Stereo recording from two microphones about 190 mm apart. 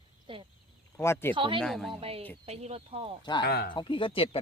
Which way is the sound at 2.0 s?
30° right (ahead or behind).